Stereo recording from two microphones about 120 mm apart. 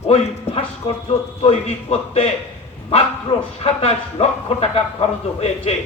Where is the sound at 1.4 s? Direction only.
60° left (ahead or behind).